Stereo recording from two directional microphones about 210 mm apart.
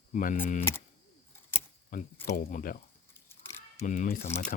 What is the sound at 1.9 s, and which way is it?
Speech, 40° left (ahead or behind).